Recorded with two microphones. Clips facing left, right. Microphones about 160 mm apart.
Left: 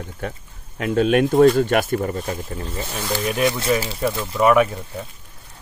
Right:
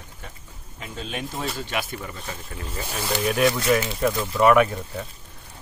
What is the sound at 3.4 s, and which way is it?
Speech, 25° left (ahead or behind).